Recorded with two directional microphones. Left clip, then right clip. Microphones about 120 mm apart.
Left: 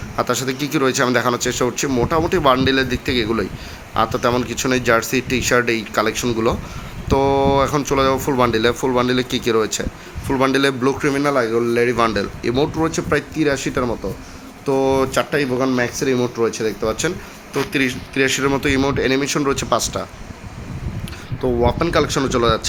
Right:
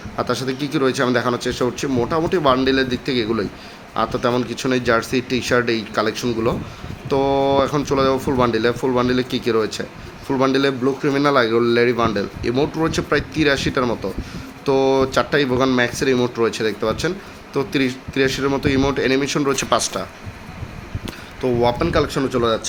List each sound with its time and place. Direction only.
0.2 s speech: 5° left (ahead or behind)
8.7 s speech: 15° left (ahead or behind)
10.2 s speech: 5° right (ahead or behind)
11.1 s speech: 15° right (ahead or behind)
11.9 s speech: centre (ahead or behind)
12.4 s speech: 10° left (ahead or behind)
17.7 s speech: 10° right (ahead or behind)
19.5 s speech: 15° left (ahead or behind)
21.6 s speech: 10° left (ahead or behind)